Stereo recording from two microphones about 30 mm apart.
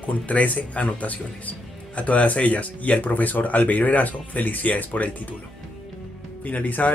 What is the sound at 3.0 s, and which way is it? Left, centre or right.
Speech, left.